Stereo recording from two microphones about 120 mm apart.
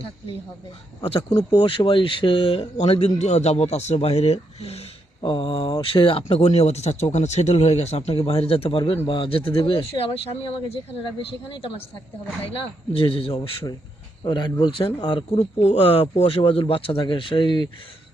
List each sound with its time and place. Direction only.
1.5 s speech: 45° left (ahead or behind)
2.7 s a man's voice: 60° left (ahead or behind)
5.2 s speech: 45° left (ahead or behind)
14.3 s speech: 40° left (ahead or behind)